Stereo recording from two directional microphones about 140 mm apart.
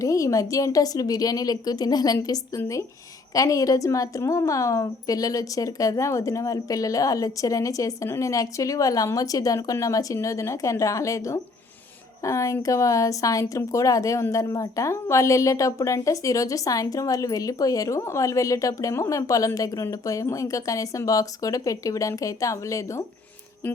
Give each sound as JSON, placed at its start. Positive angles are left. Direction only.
{"t": 0.0, "sound": "a woman's voice", "side_deg": 25}